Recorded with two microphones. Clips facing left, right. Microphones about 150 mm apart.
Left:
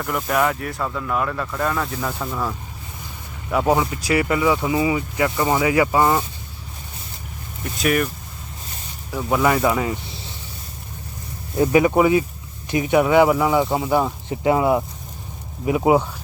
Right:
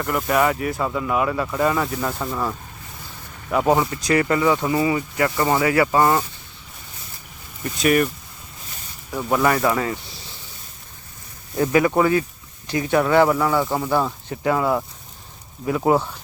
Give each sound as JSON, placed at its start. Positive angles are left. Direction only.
{"t": 0.0, "sound": "speech", "side_deg": 0}
{"t": 3.7, "sound": "speech", "side_deg": 5}
{"t": 7.8, "sound": "speech", "side_deg": 0}
{"t": 9.3, "sound": "speech", "side_deg": 5}
{"t": 11.5, "sound": "speech", "side_deg": 15}